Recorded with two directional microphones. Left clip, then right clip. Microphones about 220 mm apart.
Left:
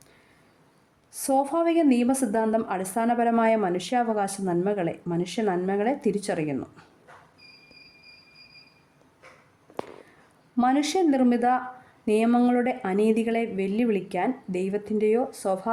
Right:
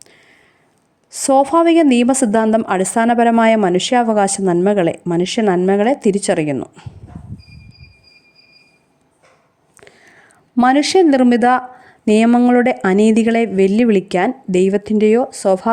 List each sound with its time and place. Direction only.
1.1 s a woman's voice: 40° right (ahead or behind)
10.5 s a woman's voice: 40° right (ahead or behind)